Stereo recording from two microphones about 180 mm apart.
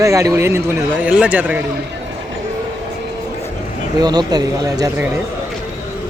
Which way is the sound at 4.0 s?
20° right (ahead or behind).